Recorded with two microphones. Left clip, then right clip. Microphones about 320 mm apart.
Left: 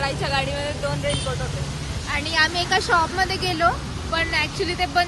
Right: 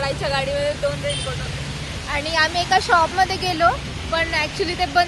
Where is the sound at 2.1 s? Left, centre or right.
Centre.